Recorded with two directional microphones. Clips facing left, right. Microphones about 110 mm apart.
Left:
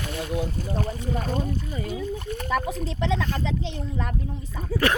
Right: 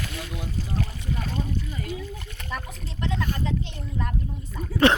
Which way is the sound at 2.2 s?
40° left (ahead or behind).